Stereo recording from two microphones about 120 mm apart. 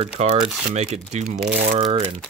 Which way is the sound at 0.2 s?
65° right (ahead or behind).